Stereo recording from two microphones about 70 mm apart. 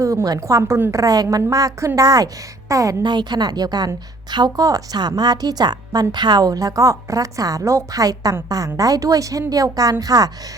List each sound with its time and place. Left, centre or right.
0.0 s a woman's voice: right
3.0 s a woman's voice: right
4.6 s a woman's voice: right
4.9 s a woman's voice: right